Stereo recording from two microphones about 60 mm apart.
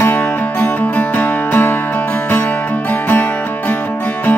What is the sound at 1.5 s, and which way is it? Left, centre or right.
Music, left.